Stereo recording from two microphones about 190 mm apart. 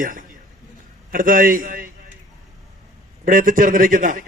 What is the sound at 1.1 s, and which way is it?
Speech, 45° right (ahead or behind).